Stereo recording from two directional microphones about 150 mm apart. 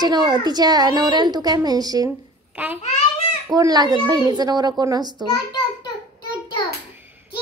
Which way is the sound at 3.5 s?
25° right (ahead or behind).